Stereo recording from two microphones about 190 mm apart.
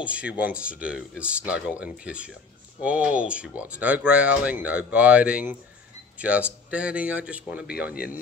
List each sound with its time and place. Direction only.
0.0 s a man's voice: 5° right (ahead or behind)
7.9 s speech: 50° left (ahead or behind)